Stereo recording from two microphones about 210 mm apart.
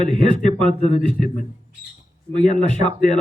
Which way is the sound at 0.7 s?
25° right (ahead or behind).